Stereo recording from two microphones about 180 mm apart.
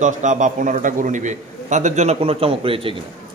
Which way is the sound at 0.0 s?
45° right (ahead or behind).